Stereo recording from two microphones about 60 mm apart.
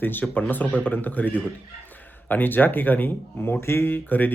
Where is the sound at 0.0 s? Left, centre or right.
Left.